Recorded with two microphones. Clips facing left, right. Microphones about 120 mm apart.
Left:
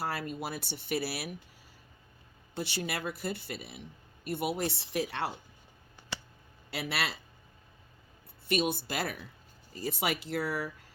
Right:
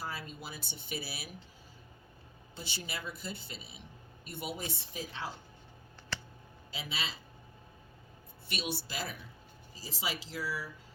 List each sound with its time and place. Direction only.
0.0 s speech: 60° left (ahead or behind)
2.6 s speech: 60° left (ahead or behind)
6.1 s a sound: 15° left (ahead or behind)
6.7 s a man's voice: 70° left (ahead or behind)
8.4 s speech: 50° left (ahead or behind)